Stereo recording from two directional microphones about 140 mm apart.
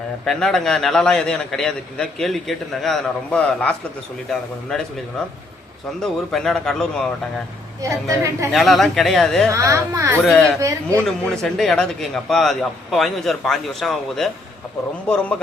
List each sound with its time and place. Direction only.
0.3 s a man's voice: 5° left (ahead or behind)
6.0 s a man's voice: 5° left (ahead or behind)
7.8 s a woman's voice: 20° right (ahead or behind)
8.5 s a man's voice: centre (ahead or behind)
9.5 s a woman's voice: 20° right (ahead or behind)
10.2 s a man's voice: 5° left (ahead or behind)